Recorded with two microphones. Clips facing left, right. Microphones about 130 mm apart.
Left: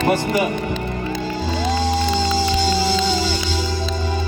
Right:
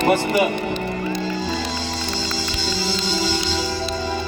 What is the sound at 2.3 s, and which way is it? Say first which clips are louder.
Music: left 7 dB; 50° left (ahead or behind).